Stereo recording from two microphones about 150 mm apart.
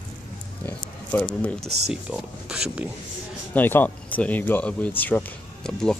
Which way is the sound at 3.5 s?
15° left (ahead or behind).